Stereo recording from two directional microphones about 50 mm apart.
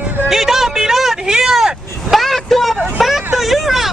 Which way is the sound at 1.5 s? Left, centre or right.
Centre.